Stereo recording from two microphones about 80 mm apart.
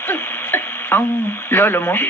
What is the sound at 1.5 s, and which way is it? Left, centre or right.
Speech, left.